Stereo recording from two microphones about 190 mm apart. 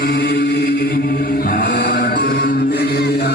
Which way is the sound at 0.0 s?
60° left (ahead or behind).